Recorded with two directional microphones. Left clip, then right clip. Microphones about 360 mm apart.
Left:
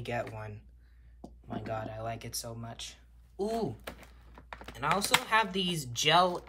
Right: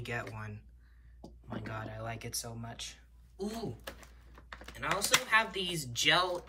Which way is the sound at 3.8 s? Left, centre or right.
Left.